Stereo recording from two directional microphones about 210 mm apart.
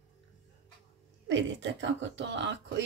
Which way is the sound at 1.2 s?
60° right (ahead or behind).